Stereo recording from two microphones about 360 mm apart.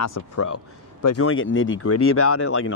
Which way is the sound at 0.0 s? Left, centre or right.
Left.